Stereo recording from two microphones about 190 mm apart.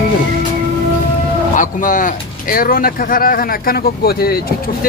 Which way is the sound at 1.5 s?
45° left (ahead or behind).